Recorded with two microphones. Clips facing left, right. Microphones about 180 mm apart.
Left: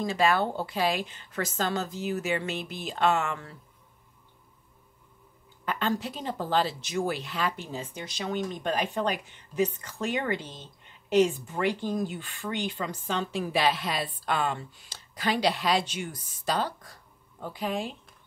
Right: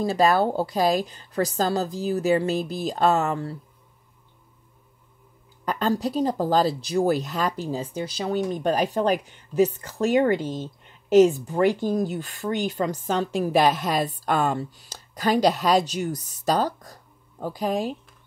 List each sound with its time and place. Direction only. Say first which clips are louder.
0.0 s speech: right 5 dB; 40° right (ahead or behind)
5.7 s speech: right 5 dB; 40° right (ahead or behind)